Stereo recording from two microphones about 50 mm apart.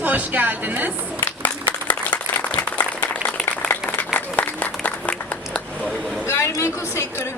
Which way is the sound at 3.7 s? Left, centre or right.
Left.